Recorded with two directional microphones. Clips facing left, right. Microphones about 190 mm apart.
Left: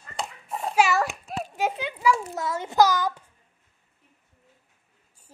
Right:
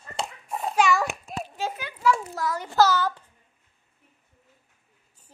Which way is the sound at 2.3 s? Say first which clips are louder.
Left 1 dB; 25° left (ahead or behind).